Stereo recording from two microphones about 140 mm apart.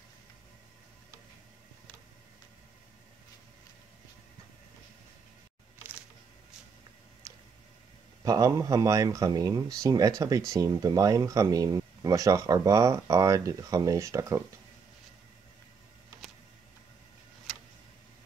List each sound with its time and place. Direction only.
8.2 s speech: 25° right (ahead or behind)